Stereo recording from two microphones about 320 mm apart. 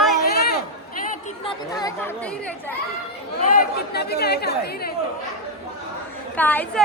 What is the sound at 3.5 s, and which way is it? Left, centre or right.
Speech, left.